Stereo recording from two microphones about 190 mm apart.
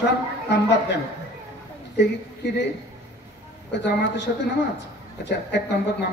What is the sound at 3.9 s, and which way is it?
Speech, 60° left (ahead or behind).